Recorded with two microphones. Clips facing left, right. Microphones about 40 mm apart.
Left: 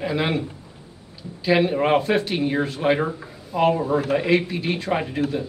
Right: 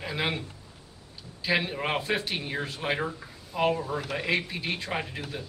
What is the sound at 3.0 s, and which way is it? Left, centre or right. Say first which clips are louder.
Speech: left 6 dB; left.